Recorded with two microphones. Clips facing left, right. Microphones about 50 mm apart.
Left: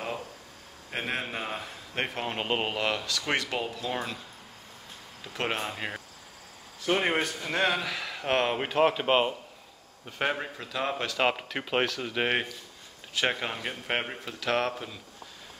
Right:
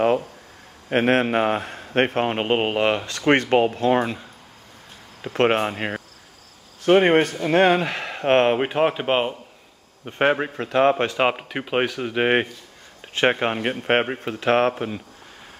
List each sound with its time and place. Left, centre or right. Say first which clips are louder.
0.8 s a man's voice: right 14 dB; right
5.2 s a man's voice: right 12 dB; right; by 9.3 s centre
10.0 s a man's voice: right 10 dB; right
11.1 s speech: right 6 dB; right
13.1 s a man's voice: right 9 dB; right